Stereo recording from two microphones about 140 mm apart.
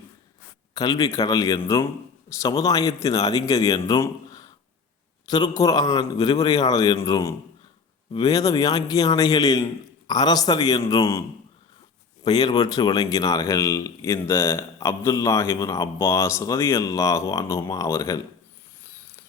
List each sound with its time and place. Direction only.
0.7 s a man's voice: 25° left (ahead or behind)
12.2 s a man's voice: 30° left (ahead or behind)